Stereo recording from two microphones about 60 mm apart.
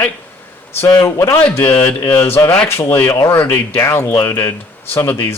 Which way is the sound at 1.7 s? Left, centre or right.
Left.